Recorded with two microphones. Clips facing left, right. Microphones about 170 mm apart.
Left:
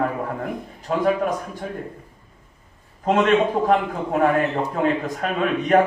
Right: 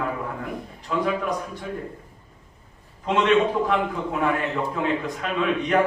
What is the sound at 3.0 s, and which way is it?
A man's voice, 45° left (ahead or behind).